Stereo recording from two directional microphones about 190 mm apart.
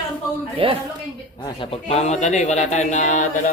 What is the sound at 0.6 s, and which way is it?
Speech, 30° right (ahead or behind).